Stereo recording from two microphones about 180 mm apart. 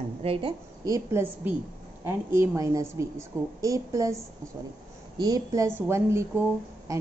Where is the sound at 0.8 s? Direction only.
15° right (ahead or behind).